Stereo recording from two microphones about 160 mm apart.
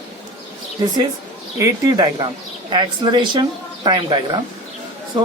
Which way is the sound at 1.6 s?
25° right (ahead or behind).